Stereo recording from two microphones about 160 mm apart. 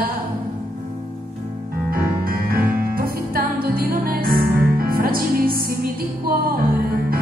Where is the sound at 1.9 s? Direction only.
65° right (ahead or behind).